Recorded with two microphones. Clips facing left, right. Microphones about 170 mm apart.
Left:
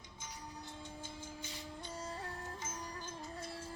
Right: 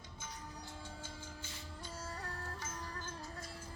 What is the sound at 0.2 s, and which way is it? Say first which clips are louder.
Music: left 1 dB; 20° left (ahead or behind).